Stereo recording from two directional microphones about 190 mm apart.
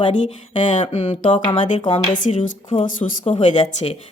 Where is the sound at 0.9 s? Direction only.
35° left (ahead or behind).